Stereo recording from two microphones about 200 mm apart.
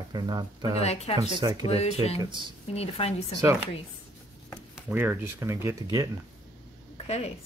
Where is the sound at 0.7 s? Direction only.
30° left (ahead or behind).